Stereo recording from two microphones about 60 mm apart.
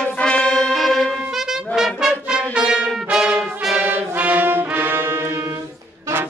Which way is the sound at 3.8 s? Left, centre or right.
Right.